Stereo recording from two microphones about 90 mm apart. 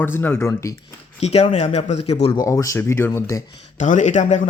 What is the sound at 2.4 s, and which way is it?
Speech, 35° left (ahead or behind).